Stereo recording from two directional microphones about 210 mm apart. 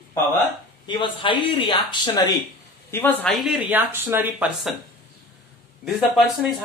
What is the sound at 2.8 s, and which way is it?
Speech, 10° left (ahead or behind).